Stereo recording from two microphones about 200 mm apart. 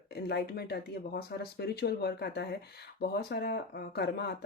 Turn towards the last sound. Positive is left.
turn(degrees=60)  # may be behind; listen again after turning